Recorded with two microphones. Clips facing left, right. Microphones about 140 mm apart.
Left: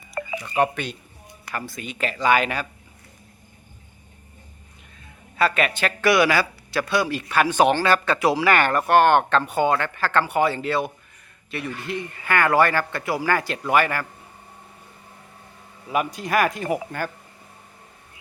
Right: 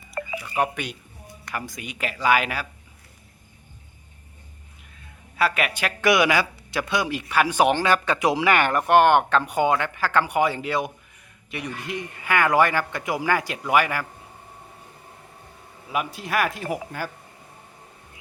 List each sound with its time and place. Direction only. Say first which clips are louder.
0.1 s a sound: left 2 dB; 5° right (ahead or behind)
1.5 s speech: left 2 dB; 15° right (ahead or behind)
5.4 s speech: left 2 dB; 10° right (ahead or behind)
15.9 s speech: left 3 dB; centre (ahead or behind)